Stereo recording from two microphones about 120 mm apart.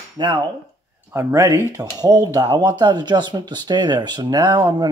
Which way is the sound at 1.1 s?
25° right (ahead or behind).